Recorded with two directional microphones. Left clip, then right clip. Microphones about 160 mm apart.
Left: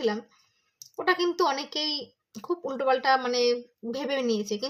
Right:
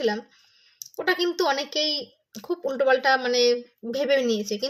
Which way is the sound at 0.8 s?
15° left (ahead or behind).